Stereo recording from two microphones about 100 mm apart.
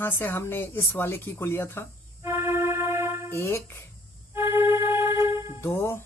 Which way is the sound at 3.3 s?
25° left (ahead or behind).